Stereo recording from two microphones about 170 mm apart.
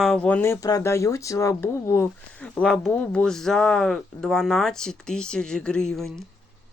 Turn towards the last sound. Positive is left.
turn(degrees=5)  # may be behind; listen again after turning